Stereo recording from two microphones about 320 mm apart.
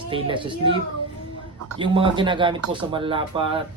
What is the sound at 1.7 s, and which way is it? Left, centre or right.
Speech, centre.